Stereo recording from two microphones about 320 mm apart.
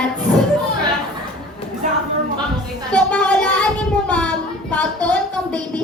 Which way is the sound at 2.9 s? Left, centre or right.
Centre.